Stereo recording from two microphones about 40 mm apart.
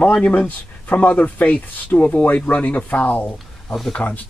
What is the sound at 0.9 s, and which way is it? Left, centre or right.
Speech, left.